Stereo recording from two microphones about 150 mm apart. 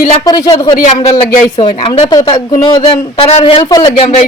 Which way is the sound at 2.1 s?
25° left (ahead or behind).